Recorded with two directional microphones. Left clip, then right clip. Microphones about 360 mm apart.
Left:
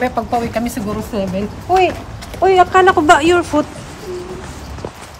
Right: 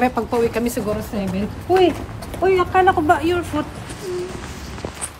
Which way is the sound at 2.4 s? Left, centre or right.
Left.